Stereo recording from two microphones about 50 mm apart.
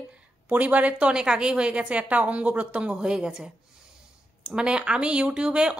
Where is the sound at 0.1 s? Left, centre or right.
Right.